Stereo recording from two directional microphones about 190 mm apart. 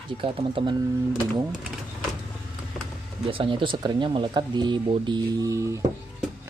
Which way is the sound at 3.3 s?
25° right (ahead or behind).